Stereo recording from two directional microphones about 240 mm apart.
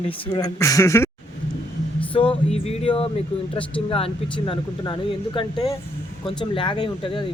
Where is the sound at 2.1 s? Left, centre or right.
Left.